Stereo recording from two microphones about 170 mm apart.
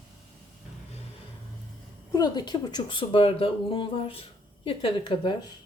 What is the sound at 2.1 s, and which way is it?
Speech, 25° left (ahead or behind).